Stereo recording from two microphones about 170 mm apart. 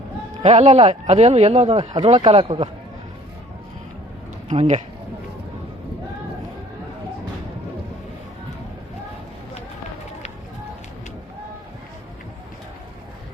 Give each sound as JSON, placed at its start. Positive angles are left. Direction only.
{"t": 0.4, "sound": "speech", "side_deg": -40}
{"t": 4.4, "sound": "speech", "side_deg": -40}